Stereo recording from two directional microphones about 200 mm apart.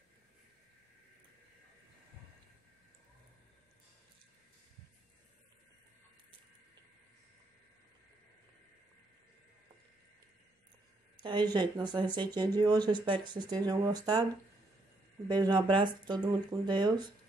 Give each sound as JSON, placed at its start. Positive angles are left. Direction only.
{"t": 11.2, "sound": "speech", "side_deg": -20}
{"t": 15.2, "sound": "speech", "side_deg": -20}